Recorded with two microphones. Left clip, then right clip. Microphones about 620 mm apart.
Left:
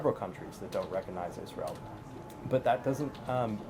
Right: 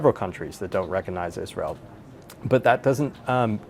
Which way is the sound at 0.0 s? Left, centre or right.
Right.